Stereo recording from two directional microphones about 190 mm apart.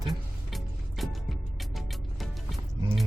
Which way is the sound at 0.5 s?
Centre (ahead or behind).